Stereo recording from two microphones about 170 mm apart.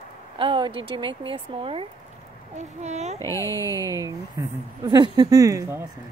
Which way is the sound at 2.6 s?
45° right (ahead or behind).